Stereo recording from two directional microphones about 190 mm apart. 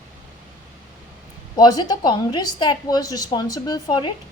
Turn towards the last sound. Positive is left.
turn(degrees=20)  # may be behind; listen again after turning